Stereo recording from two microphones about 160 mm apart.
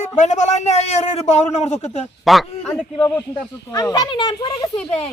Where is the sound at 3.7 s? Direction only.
25° left (ahead or behind).